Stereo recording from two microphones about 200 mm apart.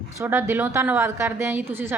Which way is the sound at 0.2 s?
10° right (ahead or behind).